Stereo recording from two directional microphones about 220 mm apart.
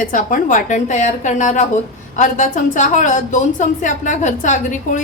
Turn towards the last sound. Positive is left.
turn(degrees=35)  # may be behind; listen again after turning